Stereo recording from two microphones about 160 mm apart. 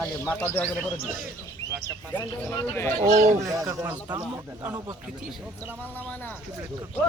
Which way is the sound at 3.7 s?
20° right (ahead or behind).